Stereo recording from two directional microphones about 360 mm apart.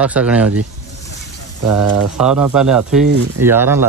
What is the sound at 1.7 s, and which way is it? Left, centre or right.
Speech, centre.